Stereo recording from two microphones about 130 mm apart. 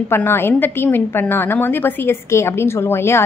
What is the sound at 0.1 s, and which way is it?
A woman's voice, 20° left (ahead or behind).